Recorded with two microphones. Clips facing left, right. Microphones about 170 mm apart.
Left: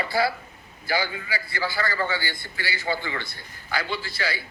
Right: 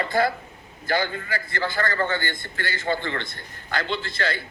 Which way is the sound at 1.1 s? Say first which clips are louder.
Right 2 dB; 50° right (ahead or behind).